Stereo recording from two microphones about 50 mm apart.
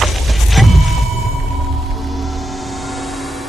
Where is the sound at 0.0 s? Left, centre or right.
Centre.